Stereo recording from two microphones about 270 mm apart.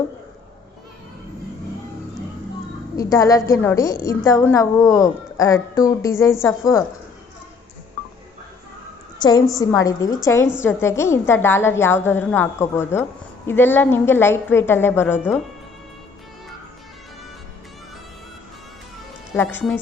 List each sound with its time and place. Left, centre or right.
2.9 s a woman's voice: centre
9.2 s a woman's voice: centre
19.3 s a woman's voice: centre